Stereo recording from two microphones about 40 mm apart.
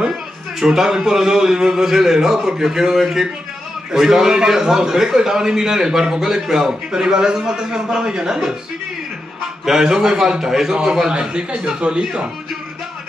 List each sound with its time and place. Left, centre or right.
0.6 s a man's voice: centre
9.7 s a man's voice: centre